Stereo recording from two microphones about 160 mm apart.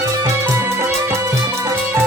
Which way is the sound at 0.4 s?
15° right (ahead or behind).